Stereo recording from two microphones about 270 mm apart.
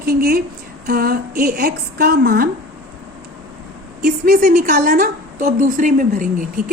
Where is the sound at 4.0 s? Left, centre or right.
Right.